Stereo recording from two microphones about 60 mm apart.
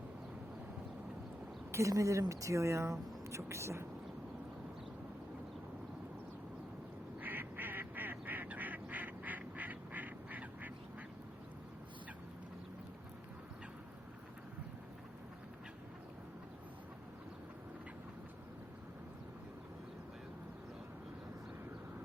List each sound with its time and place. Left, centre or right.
1.7 s a woman's voice: right
7.2 s duck: right